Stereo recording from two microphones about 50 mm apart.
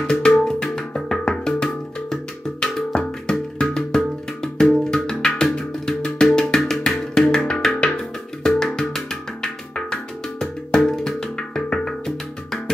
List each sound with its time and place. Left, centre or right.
0.0 s music: centre